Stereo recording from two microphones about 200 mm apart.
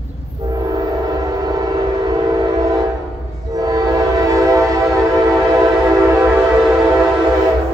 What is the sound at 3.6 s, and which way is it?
Train, 20° right (ahead or behind).